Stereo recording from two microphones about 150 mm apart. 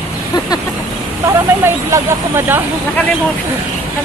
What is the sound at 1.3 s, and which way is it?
Speech, 15° right (ahead or behind).